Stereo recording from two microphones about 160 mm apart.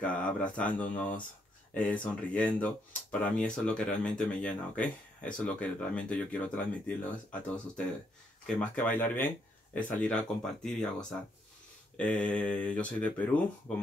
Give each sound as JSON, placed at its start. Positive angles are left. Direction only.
{"t": 0.0, "sound": "speech", "side_deg": 10}